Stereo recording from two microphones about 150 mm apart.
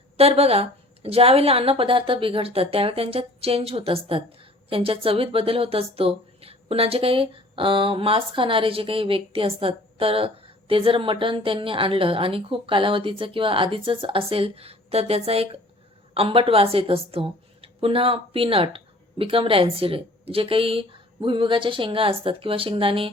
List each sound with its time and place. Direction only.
0.2 s a woman's voice: 40° right (ahead or behind)